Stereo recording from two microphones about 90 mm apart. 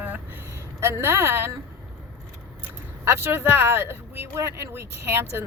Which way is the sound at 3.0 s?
25° right (ahead or behind).